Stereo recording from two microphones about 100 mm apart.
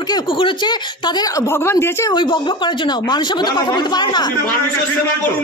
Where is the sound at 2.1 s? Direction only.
50° left (ahead or behind).